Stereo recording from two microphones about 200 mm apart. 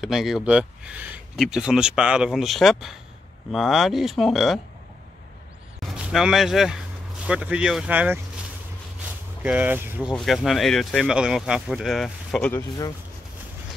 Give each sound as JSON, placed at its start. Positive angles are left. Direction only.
{"t": 0.0, "sound": "speech", "side_deg": 0}
{"t": 5.8, "sound": "speech", "side_deg": -5}
{"t": 10.1, "sound": "speech", "side_deg": 0}
{"t": 12.6, "sound": "speech", "side_deg": 20}